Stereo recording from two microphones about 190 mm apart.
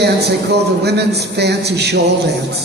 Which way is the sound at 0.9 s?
60° right (ahead or behind).